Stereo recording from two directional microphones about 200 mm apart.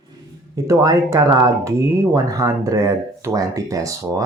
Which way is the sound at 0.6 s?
15° right (ahead or behind).